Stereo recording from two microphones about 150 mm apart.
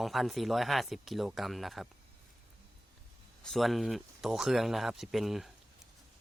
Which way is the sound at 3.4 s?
Centre (ahead or behind).